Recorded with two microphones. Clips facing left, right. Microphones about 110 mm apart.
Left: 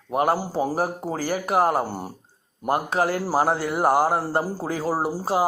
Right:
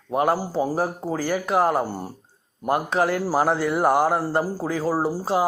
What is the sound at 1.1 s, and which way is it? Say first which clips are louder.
Speech: right 1 dB; 45° left (ahead or behind).